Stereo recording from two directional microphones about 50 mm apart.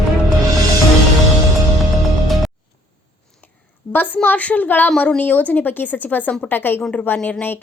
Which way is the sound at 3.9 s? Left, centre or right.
Left.